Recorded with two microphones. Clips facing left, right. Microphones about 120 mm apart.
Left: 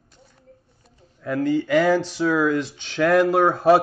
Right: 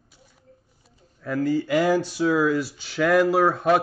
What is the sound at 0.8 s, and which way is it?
Speech, centre (ahead or behind).